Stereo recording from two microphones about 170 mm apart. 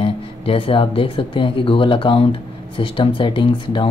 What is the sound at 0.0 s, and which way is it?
Speech, 35° left (ahead or behind).